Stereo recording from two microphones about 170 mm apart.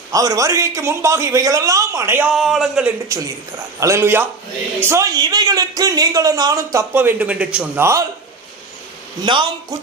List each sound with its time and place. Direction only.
0.1 s speech: 20° right (ahead or behind); by 2.9 s centre (ahead or behind)
3.1 s speech: 20° right (ahead or behind)
9.2 s speech: 25° right (ahead or behind)